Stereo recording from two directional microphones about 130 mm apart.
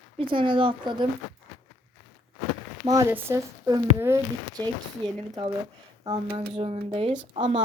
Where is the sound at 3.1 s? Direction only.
20° right (ahead or behind).